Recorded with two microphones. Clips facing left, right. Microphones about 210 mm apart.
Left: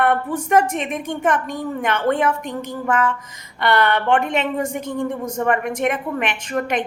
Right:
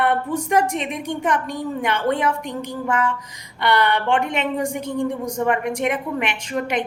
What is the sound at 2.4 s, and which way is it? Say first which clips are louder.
A woman's voice: left 1 dB; 15° right (ahead or behind).